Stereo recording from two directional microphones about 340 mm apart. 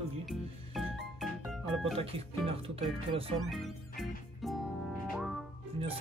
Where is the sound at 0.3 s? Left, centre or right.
Centre.